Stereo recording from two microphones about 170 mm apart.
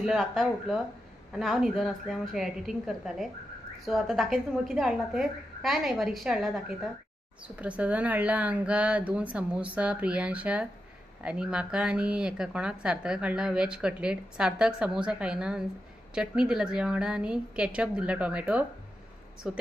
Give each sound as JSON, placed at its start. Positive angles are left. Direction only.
{"t": 0.0, "sound": "a woman's voice", "side_deg": 0}